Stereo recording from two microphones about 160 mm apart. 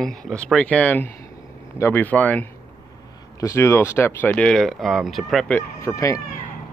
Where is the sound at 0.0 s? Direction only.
5° left (ahead or behind).